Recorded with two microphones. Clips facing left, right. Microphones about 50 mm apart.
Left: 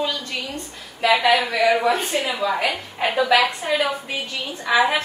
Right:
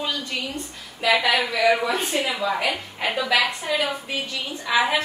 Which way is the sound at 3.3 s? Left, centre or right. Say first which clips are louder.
Left 2 dB; left.